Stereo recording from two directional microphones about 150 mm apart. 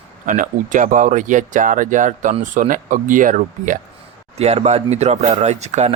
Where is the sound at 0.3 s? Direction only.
60° right (ahead or behind).